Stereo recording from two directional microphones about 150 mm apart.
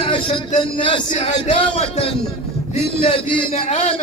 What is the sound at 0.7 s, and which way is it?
A man's voice, 35° left (ahead or behind).